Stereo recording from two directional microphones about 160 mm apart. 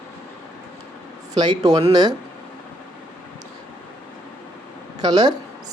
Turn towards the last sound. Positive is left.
turn(degrees=-25)  # may be behind; listen again after turning